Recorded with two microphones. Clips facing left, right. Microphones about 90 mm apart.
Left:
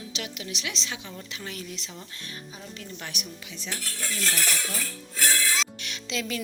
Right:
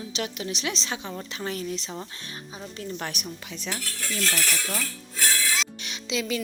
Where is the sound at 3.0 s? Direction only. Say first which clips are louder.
Right 5 dB; 45° right (ahead or behind).